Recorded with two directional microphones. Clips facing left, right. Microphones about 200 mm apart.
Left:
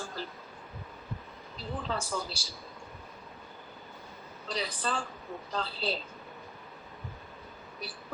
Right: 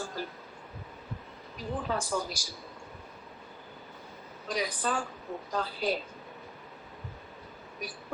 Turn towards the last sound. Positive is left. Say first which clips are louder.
# right 2 dB
turn(degrees=-15)  # may be behind; listen again after turning